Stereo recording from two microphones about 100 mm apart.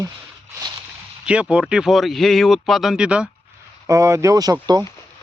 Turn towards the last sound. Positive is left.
turn(degrees=-40)  # may be behind; listen again after turning